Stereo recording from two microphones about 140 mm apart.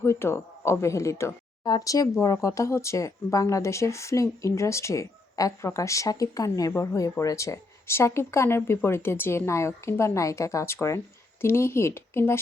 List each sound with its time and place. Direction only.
0.0 s speech: 15° left (ahead or behind)